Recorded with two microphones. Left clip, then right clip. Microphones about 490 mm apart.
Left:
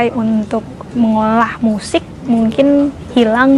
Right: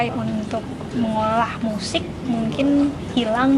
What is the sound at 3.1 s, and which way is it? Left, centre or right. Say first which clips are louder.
Speech: left 9 dB; left.